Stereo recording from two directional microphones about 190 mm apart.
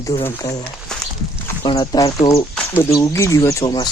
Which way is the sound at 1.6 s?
20° left (ahead or behind).